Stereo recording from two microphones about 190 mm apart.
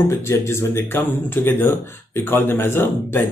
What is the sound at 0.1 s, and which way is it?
Speech, 15° left (ahead or behind).